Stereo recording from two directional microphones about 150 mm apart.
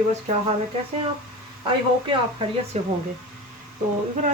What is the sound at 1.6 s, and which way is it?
Speech, 30° right (ahead or behind).